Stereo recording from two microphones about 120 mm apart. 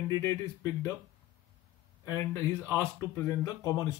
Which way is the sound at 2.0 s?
25° left (ahead or behind).